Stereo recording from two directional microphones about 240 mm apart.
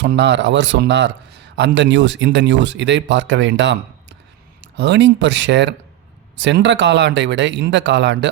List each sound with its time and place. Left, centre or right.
0.0 s a man's voice: right